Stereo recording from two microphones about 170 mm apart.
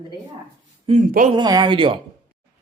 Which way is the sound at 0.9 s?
50° right (ahead or behind).